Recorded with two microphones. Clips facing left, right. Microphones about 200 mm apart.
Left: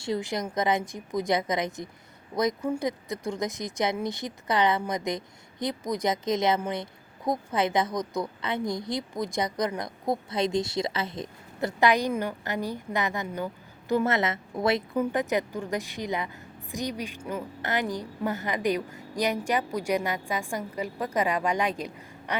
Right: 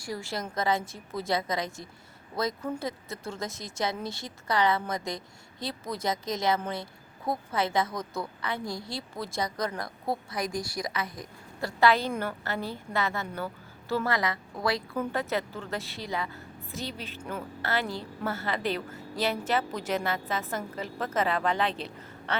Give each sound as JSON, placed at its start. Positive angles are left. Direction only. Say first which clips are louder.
{"t": 0.0, "sound": "a woman's voice", "louder": "left 5 dB", "side_deg": 20}